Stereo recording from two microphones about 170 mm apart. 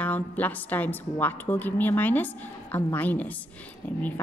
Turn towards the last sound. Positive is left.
turn(degrees=10)  # may be behind; listen again after turning